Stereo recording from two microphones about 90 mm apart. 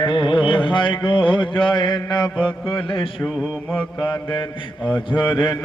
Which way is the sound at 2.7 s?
70° left (ahead or behind).